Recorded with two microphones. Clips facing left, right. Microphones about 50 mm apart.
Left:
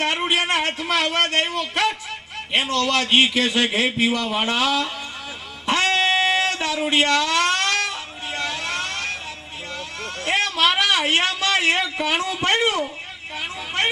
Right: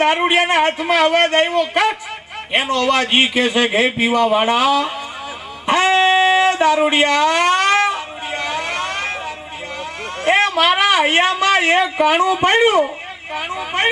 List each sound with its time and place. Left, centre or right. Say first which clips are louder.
0.0 s a man's voice: right 7 dB; right
5.6 s a sound: right 6 dB; centre
10.2 s a man's voice: right 6 dB; right